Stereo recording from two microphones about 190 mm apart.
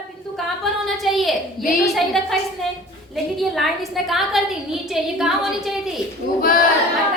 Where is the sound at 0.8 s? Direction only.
Centre (ahead or behind).